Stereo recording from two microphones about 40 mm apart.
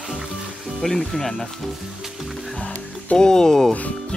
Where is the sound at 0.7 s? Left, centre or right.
Centre.